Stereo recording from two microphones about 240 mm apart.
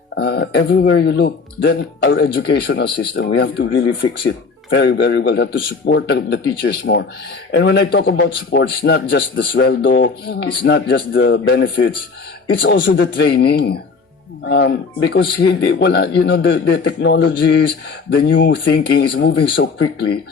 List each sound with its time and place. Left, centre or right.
0.2 s speech: left